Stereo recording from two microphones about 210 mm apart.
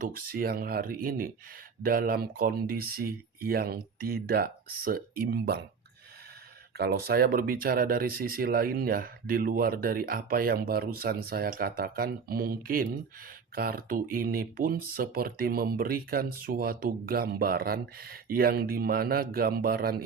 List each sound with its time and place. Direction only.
0.0 s speech: 45° right (ahead or behind)
6.7 s speech: 50° right (ahead or behind)